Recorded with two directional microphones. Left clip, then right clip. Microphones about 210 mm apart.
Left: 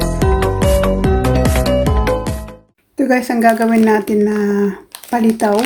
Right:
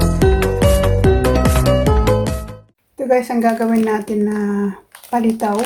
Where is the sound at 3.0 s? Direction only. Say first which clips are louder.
Left 2 dB; 30° left (ahead or behind).